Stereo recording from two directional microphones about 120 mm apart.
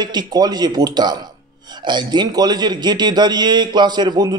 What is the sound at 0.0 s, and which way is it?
A man's voice, 35° right (ahead or behind).